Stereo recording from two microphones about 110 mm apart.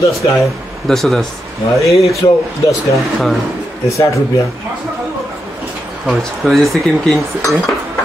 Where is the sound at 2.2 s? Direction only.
40° left (ahead or behind).